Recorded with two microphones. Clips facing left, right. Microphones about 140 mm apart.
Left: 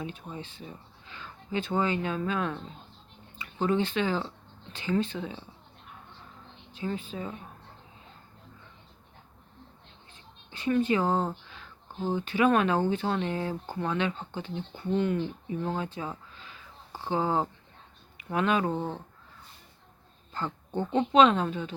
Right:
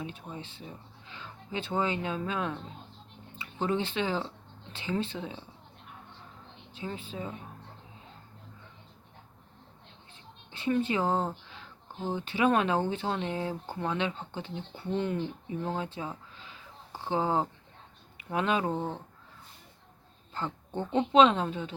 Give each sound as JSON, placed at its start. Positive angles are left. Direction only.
{"t": 1.1, "sound": "speech", "side_deg": -25}
{"t": 6.7, "sound": "speech", "side_deg": -25}
{"t": 10.5, "sound": "speech", "side_deg": -30}
{"t": 20.3, "sound": "speech", "side_deg": -25}